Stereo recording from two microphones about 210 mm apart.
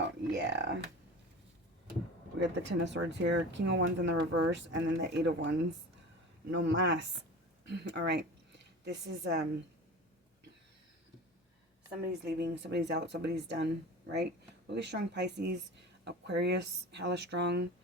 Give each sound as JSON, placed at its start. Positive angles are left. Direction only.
{"t": 0.0, "sound": "a sound", "side_deg": -55}
{"t": 2.4, "sound": "a woman's voice", "side_deg": -55}
{"t": 12.2, "sound": "speech", "side_deg": -55}